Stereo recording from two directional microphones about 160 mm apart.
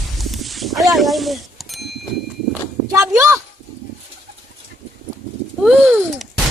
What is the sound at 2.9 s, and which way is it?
Speech, 20° right (ahead or behind).